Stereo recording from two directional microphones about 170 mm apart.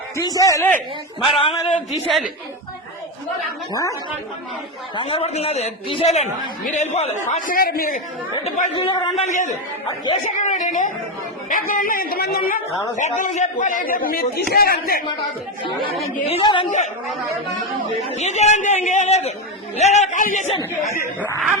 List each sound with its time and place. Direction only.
0.2 s a man's voice: 20° left (ahead or behind)
1.2 s a man's voice: 30° left (ahead or behind)
3.7 s a man's voice: 20° left (ahead or behind)
4.9 s a man's voice: 35° left (ahead or behind); by 8.0 s 55° left (ahead or behind)
8.7 s a man's voice: 30° left (ahead or behind)
9.2 s a man's voice: 45° left (ahead or behind); by 12.6 s 60° left (ahead or behind)
13.0 s a man's voice: 45° left (ahead or behind)
16.2 s a man's voice: 30° left (ahead or behind)
18.1 s a man's voice: 40° left (ahead or behind)